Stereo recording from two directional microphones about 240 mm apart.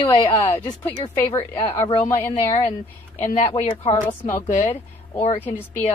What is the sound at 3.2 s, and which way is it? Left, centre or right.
Speech, left.